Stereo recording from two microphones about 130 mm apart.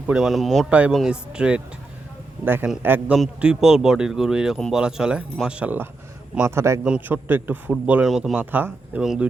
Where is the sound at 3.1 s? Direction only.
5° right (ahead or behind); by 6.8 s 20° right (ahead or behind).